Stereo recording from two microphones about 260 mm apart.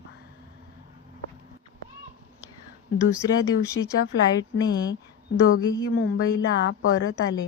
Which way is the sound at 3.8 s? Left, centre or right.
Left.